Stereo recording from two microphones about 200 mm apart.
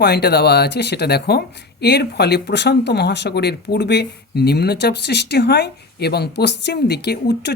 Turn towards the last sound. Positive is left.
turn(degrees=55)  # may be behind; listen again after turning